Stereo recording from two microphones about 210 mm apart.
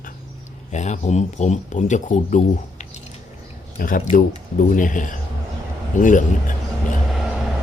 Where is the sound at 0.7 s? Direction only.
35° left (ahead or behind).